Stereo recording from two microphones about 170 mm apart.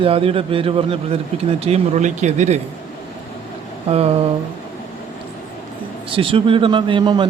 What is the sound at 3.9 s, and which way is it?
Speech, 35° right (ahead or behind).